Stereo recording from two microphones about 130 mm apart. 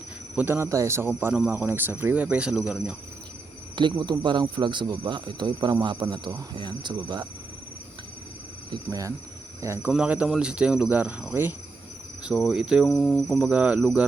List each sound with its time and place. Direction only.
0.3 s speech: 15° right (ahead or behind)
3.8 s speech: 35° right (ahead or behind)
8.7 s speech: 25° right (ahead or behind)
9.9 s speech: 10° right (ahead or behind)
12.9 s speech: 5° left (ahead or behind)
13.3 s speech: 10° right (ahead or behind)